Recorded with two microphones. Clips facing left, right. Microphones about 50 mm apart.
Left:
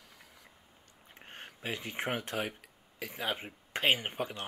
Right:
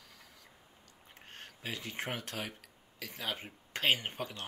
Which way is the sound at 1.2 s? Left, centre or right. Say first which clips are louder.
Left 3 dB; centre.